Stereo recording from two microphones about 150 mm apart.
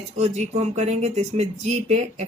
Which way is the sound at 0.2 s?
45° right (ahead or behind).